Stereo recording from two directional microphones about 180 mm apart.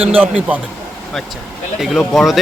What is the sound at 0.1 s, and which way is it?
Speech, 10° right (ahead or behind).